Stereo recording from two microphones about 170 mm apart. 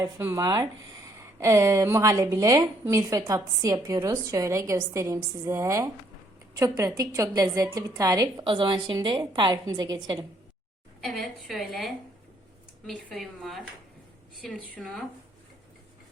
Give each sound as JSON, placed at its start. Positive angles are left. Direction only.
{"t": 0.0, "sound": "a woman's voice", "side_deg": -15}
{"t": 11.0, "sound": "a woman's voice", "side_deg": 0}
{"t": 13.1, "sound": "a woman's voice", "side_deg": 0}